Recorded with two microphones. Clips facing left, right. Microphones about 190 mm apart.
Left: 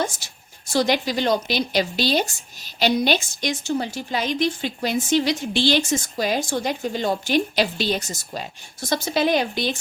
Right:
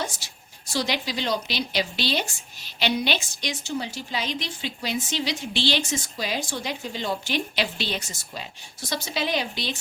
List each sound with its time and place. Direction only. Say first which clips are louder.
0.0 s a woman's voice: left 6 dB; 50° left (ahead or behind)